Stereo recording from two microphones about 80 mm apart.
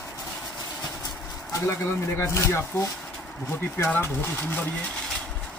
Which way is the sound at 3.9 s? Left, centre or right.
Left.